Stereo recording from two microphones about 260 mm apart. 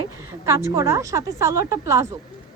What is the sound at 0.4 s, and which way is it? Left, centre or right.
A woman's voice, centre.